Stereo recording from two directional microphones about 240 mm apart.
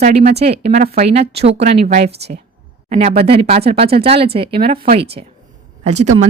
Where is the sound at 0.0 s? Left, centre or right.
Right.